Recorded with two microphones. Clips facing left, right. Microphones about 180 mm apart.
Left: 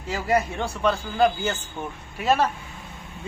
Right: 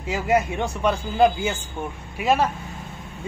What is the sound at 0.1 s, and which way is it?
Speech, 15° right (ahead or behind).